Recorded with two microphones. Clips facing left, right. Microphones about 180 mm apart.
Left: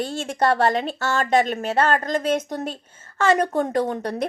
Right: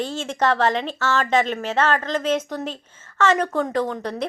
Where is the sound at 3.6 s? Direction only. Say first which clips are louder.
Left 1 dB; 50° left (ahead or behind).